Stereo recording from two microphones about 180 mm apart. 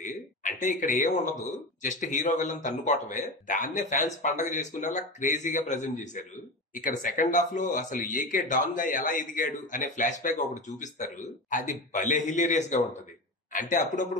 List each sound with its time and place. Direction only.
0.0 s a man's voice: 45° left (ahead or behind)